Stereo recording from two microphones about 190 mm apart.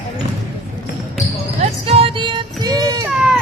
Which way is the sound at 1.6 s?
30° right (ahead or behind).